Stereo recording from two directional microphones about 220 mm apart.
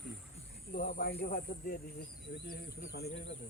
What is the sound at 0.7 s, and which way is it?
Speech, 35° left (ahead or behind).